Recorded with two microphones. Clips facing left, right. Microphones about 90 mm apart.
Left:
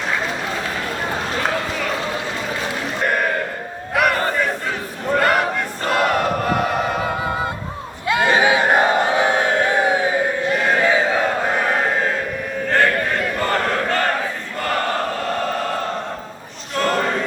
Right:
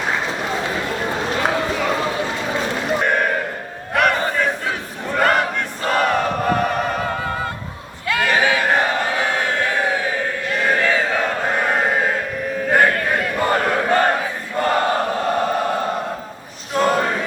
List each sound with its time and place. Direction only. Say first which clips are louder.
3.9 s battle cry: right 1 dB; 5° left (ahead or behind)
5.2 s choir: right 3 dB; 5° left (ahead or behind)
8.0 s crowd: left 2 dB; 20° left (ahead or behind); by 12.1 s 5° right (ahead or behind)
12.6 s a sound: right 1 dB; 10° right (ahead or behind)
14.6 s choir: right 3 dB; 20° right (ahead or behind)
16.7 s a sound: right 2 dB; 10° right (ahead or behind)